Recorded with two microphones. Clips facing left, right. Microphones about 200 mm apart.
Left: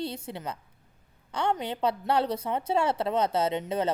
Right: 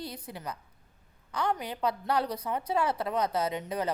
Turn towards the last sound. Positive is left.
turn(degrees=25)  # may be behind; listen again after turning